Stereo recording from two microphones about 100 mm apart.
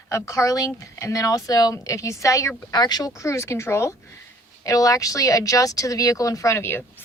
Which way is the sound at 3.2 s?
30° left (ahead or behind).